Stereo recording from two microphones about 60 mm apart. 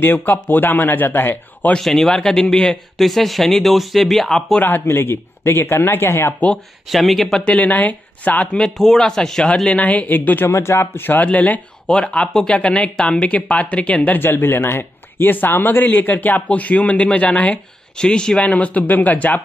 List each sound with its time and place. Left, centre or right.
0.0 s a man's voice: left
1.8 s speech: centre
4.6 s a man's voice: left
6.9 s speech: centre
7.4 s speech: left
8.5 s speech: centre
9.7 s speech: left
10.5 s speech: left
14.2 s a man's voice: left; by 18.4 s centre
18.4 s speech: left